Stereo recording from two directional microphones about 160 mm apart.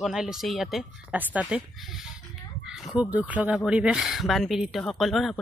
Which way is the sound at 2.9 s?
10° right (ahead or behind).